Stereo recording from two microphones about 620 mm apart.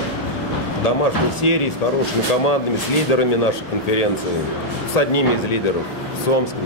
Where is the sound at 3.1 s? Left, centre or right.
Left.